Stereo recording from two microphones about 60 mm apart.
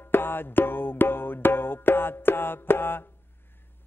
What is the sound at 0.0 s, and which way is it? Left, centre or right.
Music, left.